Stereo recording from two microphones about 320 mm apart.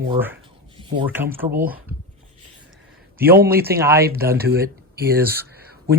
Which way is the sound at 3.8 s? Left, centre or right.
Centre.